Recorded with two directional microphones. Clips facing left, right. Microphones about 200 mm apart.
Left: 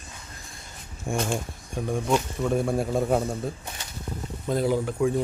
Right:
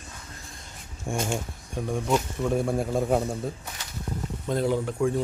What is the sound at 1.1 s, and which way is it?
Speech, 10° right (ahead or behind).